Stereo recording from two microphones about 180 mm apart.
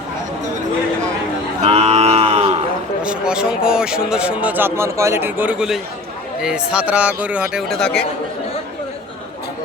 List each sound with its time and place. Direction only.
1.6 s cattle: 35° right (ahead or behind)
3.0 s a man's voice: 5° right (ahead or behind)